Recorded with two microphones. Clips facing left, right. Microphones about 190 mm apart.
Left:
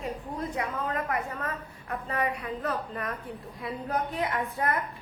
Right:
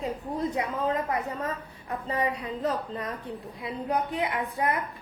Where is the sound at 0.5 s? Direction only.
20° right (ahead or behind).